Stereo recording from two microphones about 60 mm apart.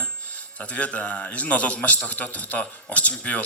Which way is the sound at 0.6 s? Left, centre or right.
Left.